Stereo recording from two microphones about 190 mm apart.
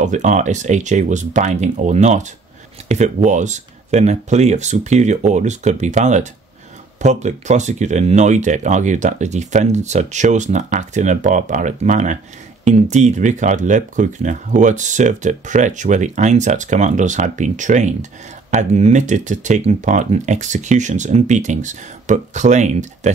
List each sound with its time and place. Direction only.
0.0 s speech: 40° right (ahead or behind)